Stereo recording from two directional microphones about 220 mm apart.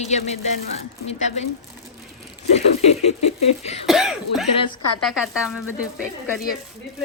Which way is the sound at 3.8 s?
Centre (ahead or behind).